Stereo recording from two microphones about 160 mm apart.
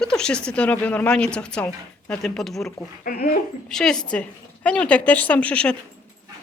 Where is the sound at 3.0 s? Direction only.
65° left (ahead or behind).